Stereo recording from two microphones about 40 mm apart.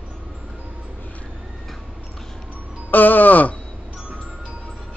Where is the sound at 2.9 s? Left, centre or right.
Left.